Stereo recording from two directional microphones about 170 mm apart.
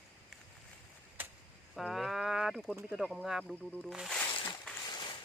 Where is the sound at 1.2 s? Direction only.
10° right (ahead or behind).